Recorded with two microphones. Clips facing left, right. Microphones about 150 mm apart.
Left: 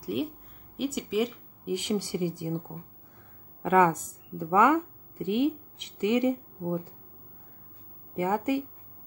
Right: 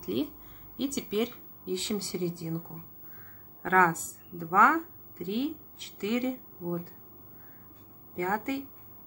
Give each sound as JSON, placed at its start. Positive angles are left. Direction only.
{"t": 0.0, "sound": "speech", "side_deg": 0}
{"t": 1.7, "sound": "a woman's voice", "side_deg": 15}
{"t": 8.2, "sound": "speech", "side_deg": 15}